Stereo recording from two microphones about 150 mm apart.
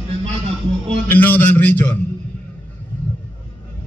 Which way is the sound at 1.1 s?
10° left (ahead or behind).